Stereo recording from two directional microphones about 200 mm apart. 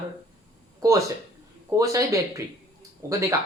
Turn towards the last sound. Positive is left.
turn(degrees=-15)  # may be behind; listen again after turning